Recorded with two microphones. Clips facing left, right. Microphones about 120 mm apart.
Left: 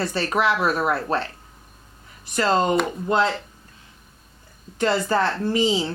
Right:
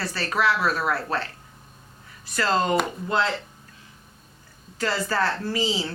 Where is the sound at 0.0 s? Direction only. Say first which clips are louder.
Left 3 dB; 20° left (ahead or behind).